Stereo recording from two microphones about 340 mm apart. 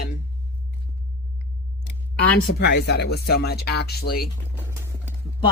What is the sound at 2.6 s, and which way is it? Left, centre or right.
Speech, left.